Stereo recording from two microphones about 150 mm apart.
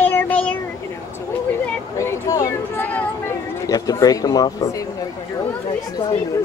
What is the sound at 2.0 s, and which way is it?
Speech, 20° left (ahead or behind).